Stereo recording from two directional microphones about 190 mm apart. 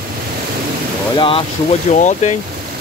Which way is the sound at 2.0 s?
40° left (ahead or behind).